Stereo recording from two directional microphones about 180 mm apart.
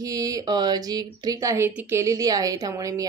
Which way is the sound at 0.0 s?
20° right (ahead or behind).